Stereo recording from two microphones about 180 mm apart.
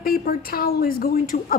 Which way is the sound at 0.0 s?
55° left (ahead or behind).